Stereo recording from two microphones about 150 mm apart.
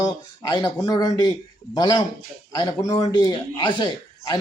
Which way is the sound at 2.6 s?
20° left (ahead or behind).